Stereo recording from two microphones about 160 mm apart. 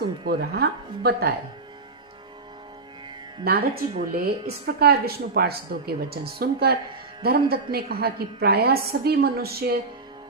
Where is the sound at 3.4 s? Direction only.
75° right (ahead or behind).